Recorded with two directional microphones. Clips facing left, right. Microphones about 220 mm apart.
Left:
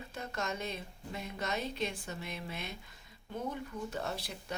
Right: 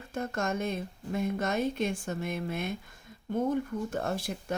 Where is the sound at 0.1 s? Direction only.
50° right (ahead or behind).